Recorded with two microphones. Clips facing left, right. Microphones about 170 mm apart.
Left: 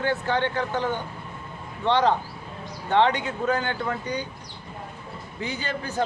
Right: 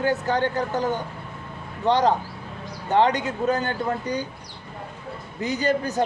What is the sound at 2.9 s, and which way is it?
A man's voice, 40° right (ahead or behind).